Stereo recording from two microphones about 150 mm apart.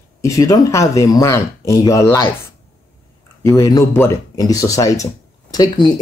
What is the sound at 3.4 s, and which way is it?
Speech, 20° left (ahead or behind).